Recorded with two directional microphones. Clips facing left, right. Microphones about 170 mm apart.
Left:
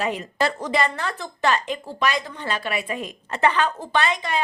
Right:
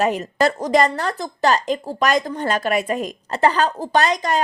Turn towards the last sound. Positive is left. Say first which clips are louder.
# right 5 dB
turn(degrees=-40)  # may be behind; listen again after turning